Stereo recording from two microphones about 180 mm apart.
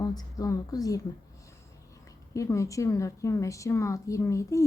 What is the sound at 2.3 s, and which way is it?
A woman's voice, 15° left (ahead or behind).